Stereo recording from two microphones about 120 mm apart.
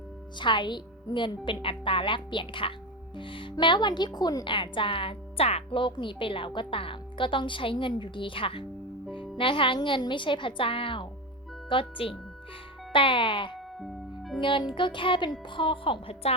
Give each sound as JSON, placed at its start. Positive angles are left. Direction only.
{"t": 0.3, "sound": "a woman's voice", "side_deg": 40}
{"t": 13.7, "sound": "music", "side_deg": 0}
{"t": 14.4, "sound": "speech", "side_deg": 45}